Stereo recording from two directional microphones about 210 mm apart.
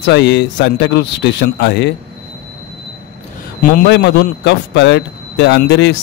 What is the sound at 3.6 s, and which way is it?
A man's voice, 45° left (ahead or behind).